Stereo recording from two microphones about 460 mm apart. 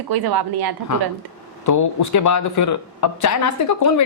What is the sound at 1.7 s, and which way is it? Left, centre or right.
Speech, left.